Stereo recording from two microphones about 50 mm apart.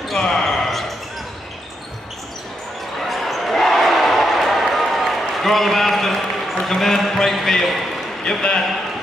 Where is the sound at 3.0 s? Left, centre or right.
Centre.